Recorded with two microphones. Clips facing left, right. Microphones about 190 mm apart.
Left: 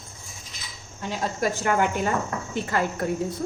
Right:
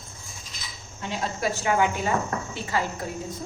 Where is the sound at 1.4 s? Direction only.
50° left (ahead or behind).